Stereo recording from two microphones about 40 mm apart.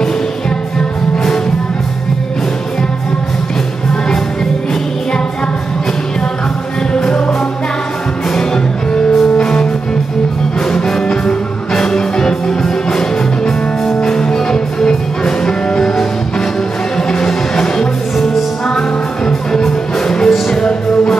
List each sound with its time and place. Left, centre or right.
0.7 s music: centre
6.9 s music: centre
9.4 s music: left
10.7 s music: centre
14.0 s music: centre
18.1 s music: centre
18.8 s music: centre